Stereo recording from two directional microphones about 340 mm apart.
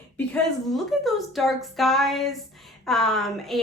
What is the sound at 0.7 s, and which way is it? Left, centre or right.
A woman's voice, centre.